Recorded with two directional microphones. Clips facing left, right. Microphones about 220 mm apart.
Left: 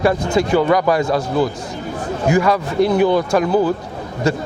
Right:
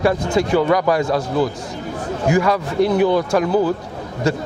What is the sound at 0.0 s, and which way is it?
A man's voice, 20° left (ahead or behind).